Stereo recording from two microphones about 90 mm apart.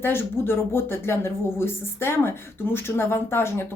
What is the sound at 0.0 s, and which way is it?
Speech, 25° left (ahead or behind).